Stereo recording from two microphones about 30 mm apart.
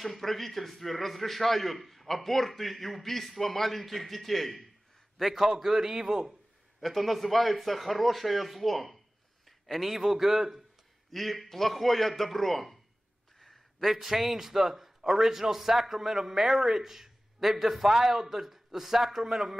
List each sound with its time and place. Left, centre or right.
0.0 s a man's voice: centre
5.5 s a man's voice: centre
6.8 s a man's voice: centre
11.1 s a man's voice: centre
13.4 s a sound: centre
14.0 s a man's voice: centre